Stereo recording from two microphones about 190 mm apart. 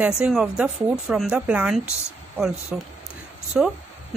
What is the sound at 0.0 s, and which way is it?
Speech, 5° right (ahead or behind).